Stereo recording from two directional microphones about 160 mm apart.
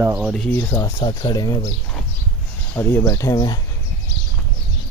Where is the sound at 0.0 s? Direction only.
10° right (ahead or behind).